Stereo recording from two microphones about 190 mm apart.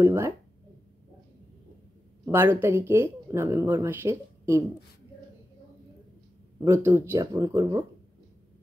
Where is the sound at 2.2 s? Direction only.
10° right (ahead or behind).